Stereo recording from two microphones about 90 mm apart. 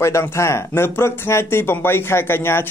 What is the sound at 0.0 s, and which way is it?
Speech, 30° left (ahead or behind).